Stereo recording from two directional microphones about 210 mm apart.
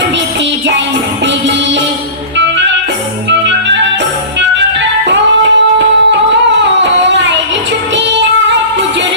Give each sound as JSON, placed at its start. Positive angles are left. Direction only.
{"t": 2.4, "sound": "music", "side_deg": -55}
{"t": 4.4, "sound": "music", "side_deg": -55}